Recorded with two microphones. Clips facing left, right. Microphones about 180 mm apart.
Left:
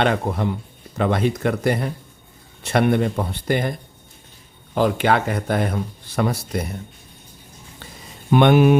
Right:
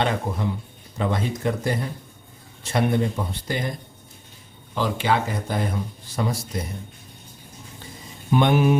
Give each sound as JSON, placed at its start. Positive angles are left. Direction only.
{"t": 0.0, "sound": "speech", "side_deg": 65}
{"t": 8.3, "sound": "speech", "side_deg": 70}